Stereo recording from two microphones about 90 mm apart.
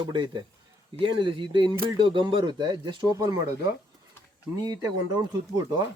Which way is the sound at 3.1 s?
40° right (ahead or behind).